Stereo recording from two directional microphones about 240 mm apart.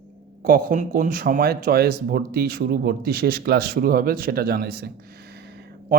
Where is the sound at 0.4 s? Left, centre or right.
Right.